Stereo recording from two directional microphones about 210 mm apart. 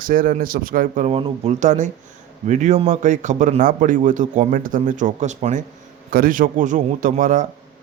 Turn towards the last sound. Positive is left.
turn(degrees=-35)  # may be behind; listen again after turning